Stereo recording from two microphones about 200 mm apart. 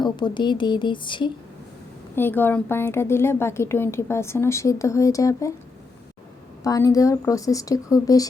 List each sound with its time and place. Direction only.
0.0 s speech: 20° left (ahead or behind)
2.1 s a woman's voice: 10° left (ahead or behind)
6.6 s a woman's voice: 15° left (ahead or behind)